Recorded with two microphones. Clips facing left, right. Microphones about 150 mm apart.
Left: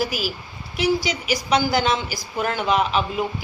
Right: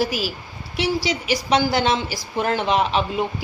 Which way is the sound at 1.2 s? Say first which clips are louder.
Right 2 dB; 35° right (ahead or behind).